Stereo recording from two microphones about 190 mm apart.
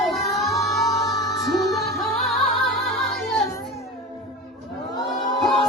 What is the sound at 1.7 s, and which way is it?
Music, centre (ahead or behind).